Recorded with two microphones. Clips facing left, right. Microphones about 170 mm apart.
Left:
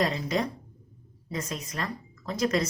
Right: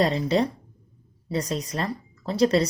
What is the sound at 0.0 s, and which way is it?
A woman's voice, 30° right (ahead or behind).